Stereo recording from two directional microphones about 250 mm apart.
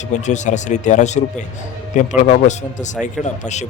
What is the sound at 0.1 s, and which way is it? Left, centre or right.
Speech, left.